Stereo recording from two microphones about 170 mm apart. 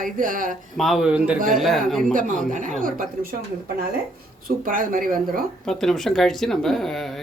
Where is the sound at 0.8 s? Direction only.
Centre (ahead or behind).